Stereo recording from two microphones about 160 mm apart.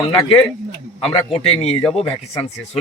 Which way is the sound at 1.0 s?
40° left (ahead or behind).